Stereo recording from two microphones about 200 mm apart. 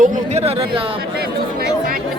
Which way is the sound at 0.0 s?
35° right (ahead or behind).